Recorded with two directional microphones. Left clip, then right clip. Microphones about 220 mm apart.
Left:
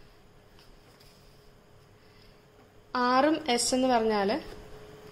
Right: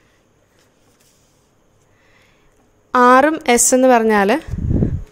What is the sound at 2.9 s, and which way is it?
A woman's voice, 40° right (ahead or behind).